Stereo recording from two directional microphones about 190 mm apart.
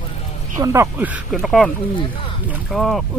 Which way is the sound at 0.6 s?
15° right (ahead or behind).